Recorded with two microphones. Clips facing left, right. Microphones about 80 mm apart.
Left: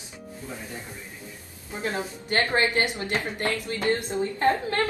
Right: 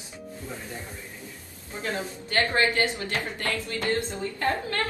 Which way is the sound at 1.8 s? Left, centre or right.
Left.